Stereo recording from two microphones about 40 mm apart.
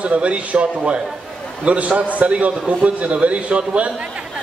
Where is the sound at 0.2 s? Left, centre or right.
Right.